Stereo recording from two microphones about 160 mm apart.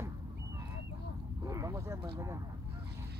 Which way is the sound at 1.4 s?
20° right (ahead or behind).